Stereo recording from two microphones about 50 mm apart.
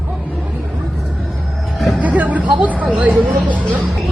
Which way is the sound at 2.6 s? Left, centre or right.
Right.